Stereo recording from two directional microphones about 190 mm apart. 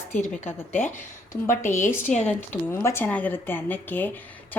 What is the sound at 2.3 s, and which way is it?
Speech, 15° left (ahead or behind).